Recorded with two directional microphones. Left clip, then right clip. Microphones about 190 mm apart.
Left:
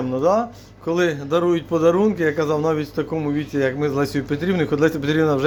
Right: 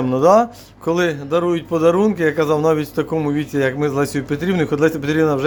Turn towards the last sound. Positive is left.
turn(degrees=-5)  # may be behind; listen again after turning